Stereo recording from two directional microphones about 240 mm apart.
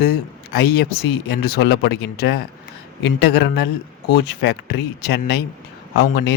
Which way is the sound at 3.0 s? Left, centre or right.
Left.